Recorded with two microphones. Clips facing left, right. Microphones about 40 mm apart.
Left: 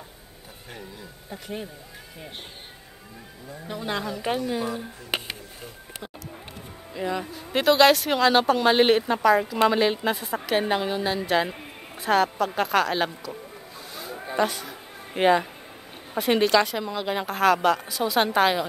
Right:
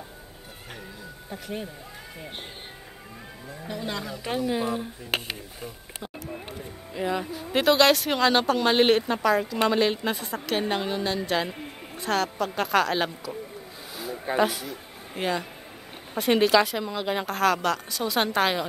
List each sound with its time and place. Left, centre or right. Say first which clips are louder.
1.3 s speech: even; centre
3.6 s speech: left 3 dB; centre
6.9 s speech: right 1 dB; centre
14.4 s speech: left 1 dB; centre
15.1 s speech: left 8 dB; left
16.2 s speech: even; centre